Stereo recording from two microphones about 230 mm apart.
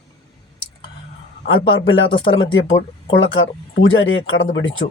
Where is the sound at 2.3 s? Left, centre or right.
Left.